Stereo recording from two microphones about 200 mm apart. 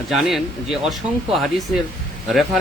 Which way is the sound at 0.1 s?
Centre (ahead or behind).